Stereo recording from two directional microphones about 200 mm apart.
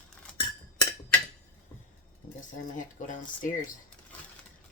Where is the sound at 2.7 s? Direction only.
40° left (ahead or behind).